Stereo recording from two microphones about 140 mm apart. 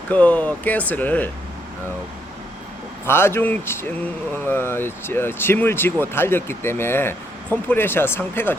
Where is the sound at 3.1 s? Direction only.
15° left (ahead or behind).